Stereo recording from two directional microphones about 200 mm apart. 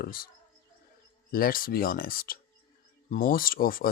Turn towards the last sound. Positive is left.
turn(degrees=45)  # may be behind; listen again after turning